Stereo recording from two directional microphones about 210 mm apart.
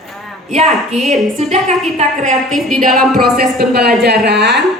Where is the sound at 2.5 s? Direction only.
Centre (ahead or behind).